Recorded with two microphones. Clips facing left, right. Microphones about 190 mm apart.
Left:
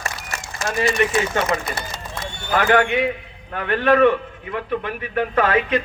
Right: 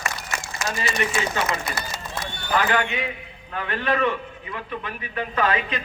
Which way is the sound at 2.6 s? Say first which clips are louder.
Left 6 dB; 55° left (ahead or behind).